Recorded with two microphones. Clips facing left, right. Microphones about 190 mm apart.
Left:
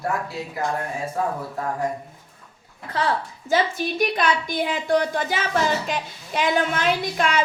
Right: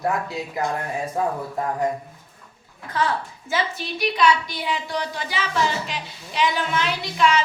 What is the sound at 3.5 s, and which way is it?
A woman's voice, 50° left (ahead or behind).